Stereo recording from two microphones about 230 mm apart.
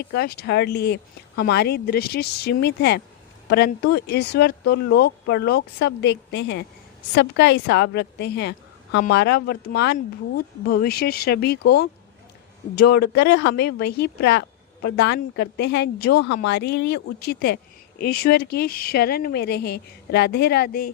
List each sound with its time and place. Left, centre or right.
0.0 s speech: left